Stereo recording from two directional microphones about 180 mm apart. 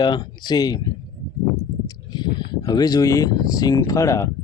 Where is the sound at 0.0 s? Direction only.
25° left (ahead or behind).